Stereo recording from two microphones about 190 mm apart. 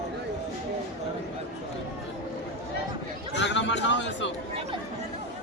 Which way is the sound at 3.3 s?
70° left (ahead or behind).